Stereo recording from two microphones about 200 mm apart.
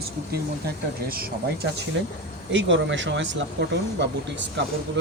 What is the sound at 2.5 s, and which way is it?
Speech, 65° right (ahead or behind).